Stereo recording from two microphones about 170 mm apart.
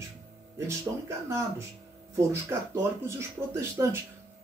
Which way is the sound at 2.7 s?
15° right (ahead or behind).